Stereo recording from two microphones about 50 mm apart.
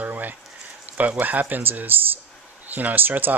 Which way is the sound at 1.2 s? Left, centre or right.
Right.